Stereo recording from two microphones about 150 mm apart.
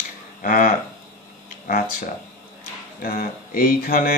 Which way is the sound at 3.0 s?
80° left.